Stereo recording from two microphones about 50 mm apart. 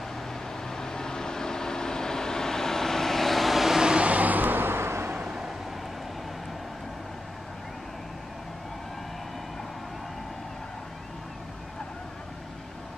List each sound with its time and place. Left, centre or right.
0.7 s vehicle: centre
3.9 s vehicle: right
5.1 s a sound: right